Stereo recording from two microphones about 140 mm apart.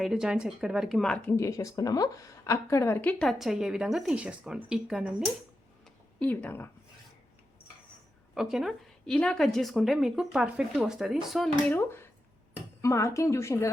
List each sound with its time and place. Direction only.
0.0 s a woman's voice: 5° right (ahead or behind)
1.1 s speech: 10° left (ahead or behind)
1.4 s a woman's voice: 20° left (ahead or behind); by 5.3 s 5° right (ahead or behind)
5.8 s a sound: 10° left (ahead or behind)
8.4 s a woman's voice: 5° right (ahead or behind)
11.7 s speech: 15° left (ahead or behind)